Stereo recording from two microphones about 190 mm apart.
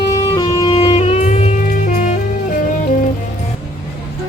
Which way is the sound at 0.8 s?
30° left (ahead or behind).